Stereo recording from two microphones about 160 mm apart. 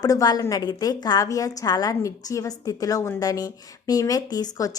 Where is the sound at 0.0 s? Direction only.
25° left (ahead or behind).